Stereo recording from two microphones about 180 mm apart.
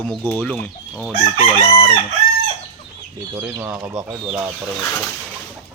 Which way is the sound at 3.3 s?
15° right (ahead or behind).